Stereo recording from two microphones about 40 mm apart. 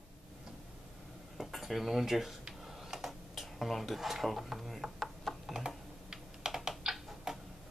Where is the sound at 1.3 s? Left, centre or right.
Centre.